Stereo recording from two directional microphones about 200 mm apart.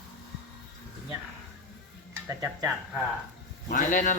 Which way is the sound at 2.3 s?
15° right (ahead or behind).